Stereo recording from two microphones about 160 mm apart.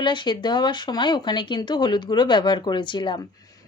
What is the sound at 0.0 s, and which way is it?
Speech, 30° left (ahead or behind).